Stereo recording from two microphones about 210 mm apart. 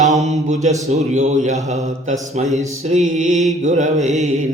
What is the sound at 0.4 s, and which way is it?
Speech, 35° right (ahead or behind).